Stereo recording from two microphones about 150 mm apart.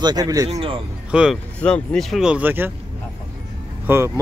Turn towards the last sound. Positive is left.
turn(degrees=-15)  # may be behind; listen again after turning